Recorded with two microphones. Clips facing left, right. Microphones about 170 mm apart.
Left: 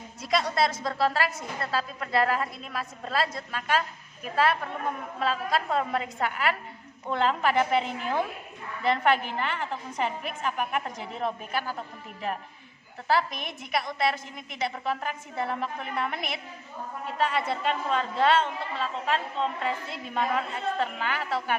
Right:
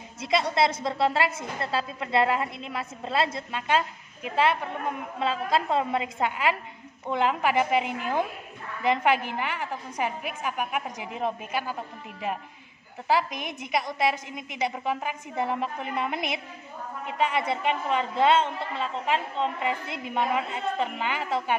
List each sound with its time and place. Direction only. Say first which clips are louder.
0.2 s a woman's voice: right 2 dB; 25° right (ahead or behind)
13.1 s a woman's voice: right 1 dB; 20° right (ahead or behind)